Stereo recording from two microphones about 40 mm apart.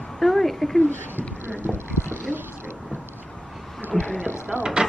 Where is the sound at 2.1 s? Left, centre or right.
Right.